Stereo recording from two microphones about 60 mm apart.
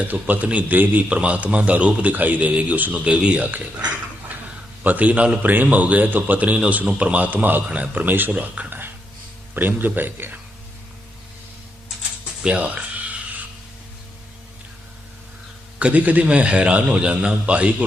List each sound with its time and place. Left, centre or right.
0.0 s a man's voice: right
12.4 s music: centre
15.8 s a man's voice: right